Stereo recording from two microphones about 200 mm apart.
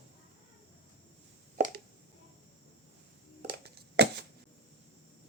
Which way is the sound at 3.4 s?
55° right (ahead or behind).